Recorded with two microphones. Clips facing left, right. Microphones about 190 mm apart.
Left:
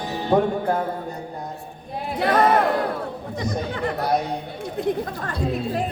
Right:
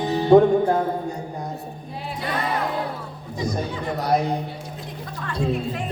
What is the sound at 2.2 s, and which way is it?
Music, 70° left (ahead or behind).